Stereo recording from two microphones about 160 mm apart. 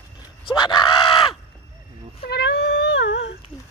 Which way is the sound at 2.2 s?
90° left.